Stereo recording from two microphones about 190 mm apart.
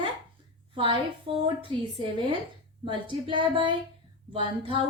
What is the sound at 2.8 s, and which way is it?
Speech, 25° right (ahead or behind).